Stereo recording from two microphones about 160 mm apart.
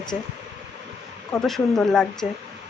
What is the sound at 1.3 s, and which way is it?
Speech, 5° left (ahead or behind).